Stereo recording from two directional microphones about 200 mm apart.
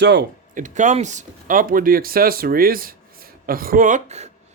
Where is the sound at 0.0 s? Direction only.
60° right (ahead or behind).